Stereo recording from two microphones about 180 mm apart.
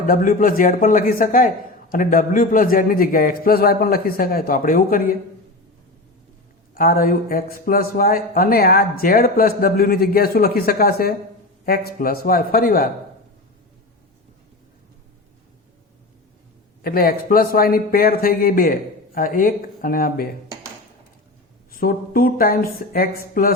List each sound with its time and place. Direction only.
0.1 s speech: 50° left (ahead or behind)
6.7 s a man's voice: 55° left (ahead or behind)
16.8 s speech: 55° left (ahead or behind)
21.7 s speech: 50° left (ahead or behind)